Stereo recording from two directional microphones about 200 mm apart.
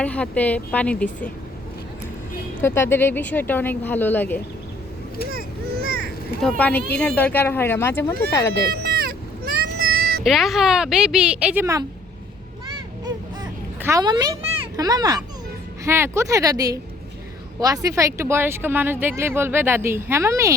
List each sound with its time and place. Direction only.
0.0 s a woman's voice: 5° left (ahead or behind)
2.6 s a woman's voice: 10° left (ahead or behind)
5.3 s a sound: 50° right (ahead or behind)
6.6 s a woman's voice: 5° left (ahead or behind)
8.7 s a sound: 50° right (ahead or behind)
10.0 s cat: 50° right (ahead or behind)
10.2 s speech: centre (ahead or behind)
13.1 s a sound: 20° right (ahead or behind)
15.8 s speech: 15° right (ahead or behind)